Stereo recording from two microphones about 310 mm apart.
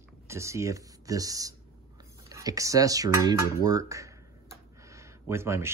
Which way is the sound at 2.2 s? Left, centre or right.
Centre.